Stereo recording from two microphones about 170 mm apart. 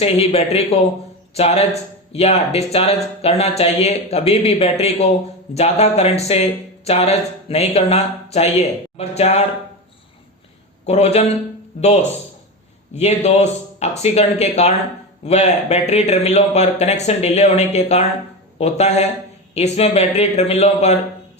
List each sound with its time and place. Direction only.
0.0 s speech: 35° left (ahead or behind)
10.8 s speech: 40° left (ahead or behind)
12.9 s speech: 40° left (ahead or behind)